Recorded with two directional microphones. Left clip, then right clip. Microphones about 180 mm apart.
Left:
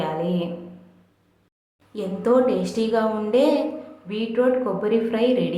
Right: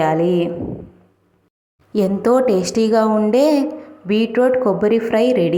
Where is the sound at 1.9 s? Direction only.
45° right (ahead or behind).